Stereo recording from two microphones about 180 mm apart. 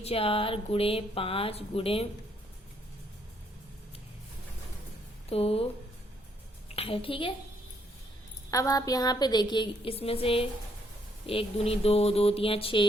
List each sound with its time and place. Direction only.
0.0 s speech: 30° left (ahead or behind)
5.3 s speech: 35° left (ahead or behind)
6.7 s speech: 30° left (ahead or behind)
8.4 s a woman's voice: 20° left (ahead or behind)